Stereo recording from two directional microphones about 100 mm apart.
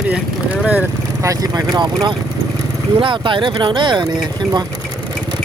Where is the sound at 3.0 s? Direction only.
55° right (ahead or behind).